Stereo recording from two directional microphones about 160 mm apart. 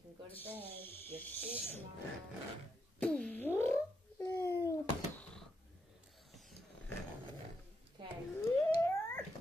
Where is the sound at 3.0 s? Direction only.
5° left (ahead or behind).